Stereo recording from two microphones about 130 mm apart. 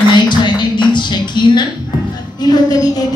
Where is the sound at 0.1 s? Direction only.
35° left (ahead or behind).